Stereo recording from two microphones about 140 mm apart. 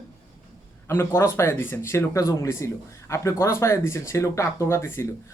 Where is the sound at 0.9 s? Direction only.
20° left (ahead or behind).